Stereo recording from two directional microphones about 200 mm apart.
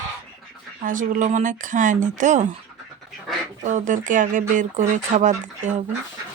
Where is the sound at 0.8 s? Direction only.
40° right (ahead or behind).